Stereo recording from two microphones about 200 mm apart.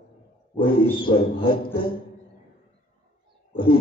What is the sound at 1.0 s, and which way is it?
Rub, 25° left (ahead or behind).